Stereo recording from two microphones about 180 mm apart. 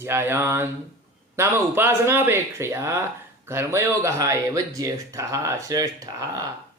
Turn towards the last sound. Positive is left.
turn(degrees=-20)  # may be behind; listen again after turning